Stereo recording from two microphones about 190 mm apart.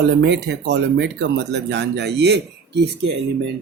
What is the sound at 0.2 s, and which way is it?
Speech, 60° right (ahead or behind).